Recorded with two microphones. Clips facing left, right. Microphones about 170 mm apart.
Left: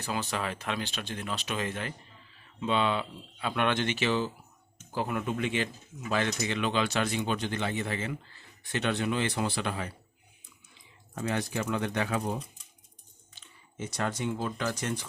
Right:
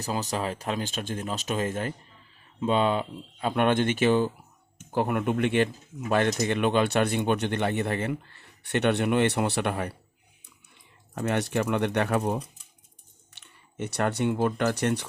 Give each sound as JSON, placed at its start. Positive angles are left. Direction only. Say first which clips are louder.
{"t": 0.0, "sound": "speech", "louder": "right 3 dB", "side_deg": -40}
{"t": 13.4, "sound": "speech", "louder": "right 5 dB", "side_deg": -65}